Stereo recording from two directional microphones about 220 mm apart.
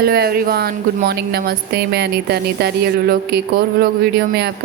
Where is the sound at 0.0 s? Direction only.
45° right (ahead or behind).